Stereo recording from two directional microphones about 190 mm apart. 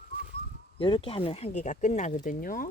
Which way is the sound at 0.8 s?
25° left (ahead or behind).